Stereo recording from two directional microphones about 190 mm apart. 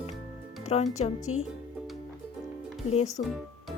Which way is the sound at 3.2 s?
40° left (ahead or behind).